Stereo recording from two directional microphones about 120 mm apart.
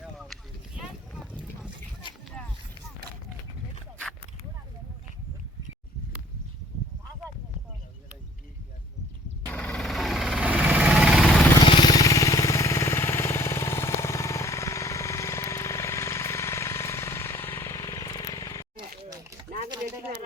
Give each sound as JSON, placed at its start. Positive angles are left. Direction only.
{"t": 9.5, "sound": "vehicle", "side_deg": 10}
{"t": 11.6, "sound": "vehicle", "side_deg": 40}